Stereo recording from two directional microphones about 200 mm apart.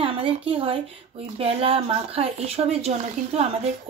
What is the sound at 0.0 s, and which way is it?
A woman's voice, 25° right (ahead or behind).